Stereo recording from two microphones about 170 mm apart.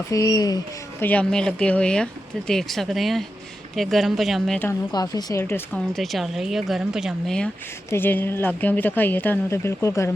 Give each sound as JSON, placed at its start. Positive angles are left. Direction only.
{"t": 0.1, "sound": "speech", "side_deg": 20}
{"t": 1.0, "sound": "speech", "side_deg": 5}
{"t": 4.9, "sound": "speech", "side_deg": 25}